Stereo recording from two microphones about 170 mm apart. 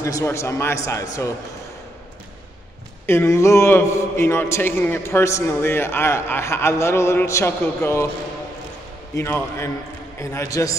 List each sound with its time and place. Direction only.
0.0 s a man's voice: 15° left (ahead or behind)
3.1 s a man's voice: 15° left (ahead or behind)
9.1 s a man's voice: 15° left (ahead or behind)